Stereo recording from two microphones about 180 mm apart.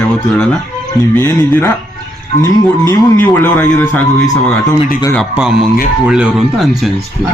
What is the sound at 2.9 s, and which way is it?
Speech, 10° left (ahead or behind).